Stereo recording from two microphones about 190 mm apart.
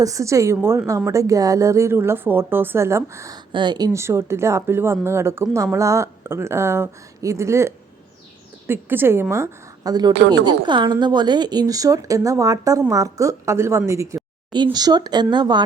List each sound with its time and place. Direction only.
0.0 s a woman's voice: 15° right (ahead or behind)